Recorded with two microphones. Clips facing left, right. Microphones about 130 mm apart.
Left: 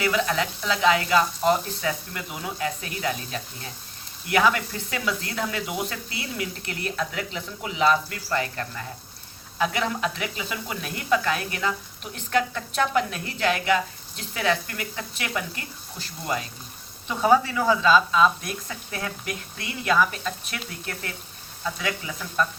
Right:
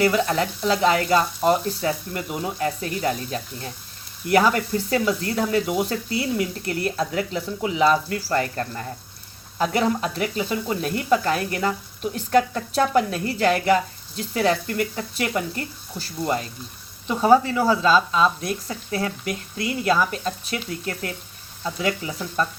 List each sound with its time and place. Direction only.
0.0 s speech: 35° right (ahead or behind)